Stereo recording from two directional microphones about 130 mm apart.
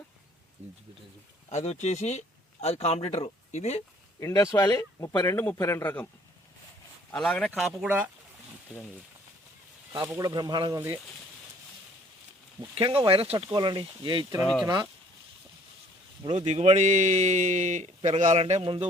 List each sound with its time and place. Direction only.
1.5 s speech: 60° left (ahead or behind)
4.2 s a man's voice: 25° left (ahead or behind)
7.1 s speech: 5° left (ahead or behind)
7.9 s speech: 10° right (ahead or behind)
10.2 s speech: 30° right (ahead or behind)
10.8 s speech: 20° right (ahead or behind)
12.7 s speech: 45° right (ahead or behind)
16.5 s speech: 60° right (ahead or behind)
18.6 s speech: 40° right (ahead or behind)